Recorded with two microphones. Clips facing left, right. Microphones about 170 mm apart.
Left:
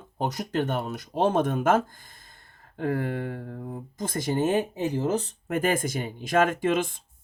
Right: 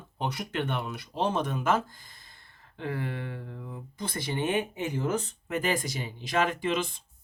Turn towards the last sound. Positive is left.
turn(degrees=50)  # may be behind; listen again after turning